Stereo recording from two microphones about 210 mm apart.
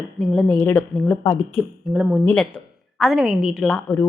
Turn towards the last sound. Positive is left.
turn(degrees=5)  # may be behind; listen again after turning